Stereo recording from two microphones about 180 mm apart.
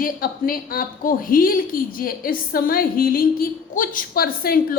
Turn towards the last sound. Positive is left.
turn(degrees=55)  # may be behind; listen again after turning